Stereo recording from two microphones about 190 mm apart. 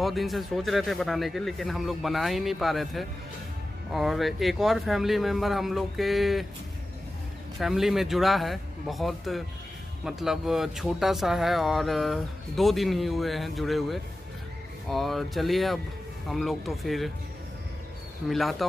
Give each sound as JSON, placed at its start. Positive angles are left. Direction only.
{"t": 0.0, "sound": "speech", "side_deg": 0}
{"t": 7.5, "sound": "speech", "side_deg": 0}
{"t": 18.3, "sound": "speech", "side_deg": 0}